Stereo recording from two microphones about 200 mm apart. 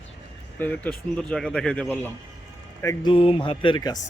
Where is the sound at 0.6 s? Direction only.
10° left (ahead or behind).